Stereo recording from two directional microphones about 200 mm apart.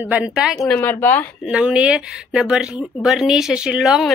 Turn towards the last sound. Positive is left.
turn(degrees=0)  # may be behind; listen again after turning